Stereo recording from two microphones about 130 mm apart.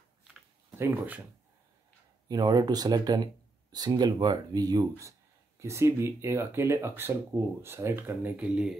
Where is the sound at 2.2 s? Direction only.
30° right (ahead or behind); by 8.7 s 5° right (ahead or behind).